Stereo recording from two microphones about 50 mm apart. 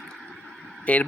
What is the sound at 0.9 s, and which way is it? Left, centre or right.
Speech, left.